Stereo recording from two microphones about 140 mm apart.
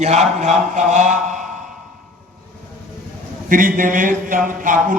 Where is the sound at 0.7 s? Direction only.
60° right (ahead or behind).